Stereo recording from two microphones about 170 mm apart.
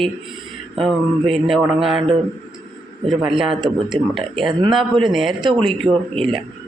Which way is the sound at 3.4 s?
Centre (ahead or behind).